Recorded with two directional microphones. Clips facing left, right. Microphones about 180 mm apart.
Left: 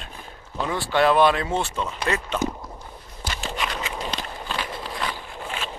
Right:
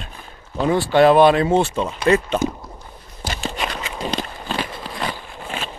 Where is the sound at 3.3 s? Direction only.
35° right (ahead or behind).